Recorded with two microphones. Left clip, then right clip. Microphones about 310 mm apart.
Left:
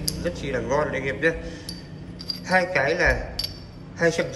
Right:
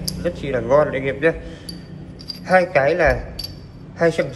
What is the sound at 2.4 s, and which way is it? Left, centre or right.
Speech, centre.